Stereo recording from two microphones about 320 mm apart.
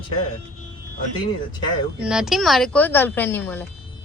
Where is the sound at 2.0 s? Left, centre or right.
Centre.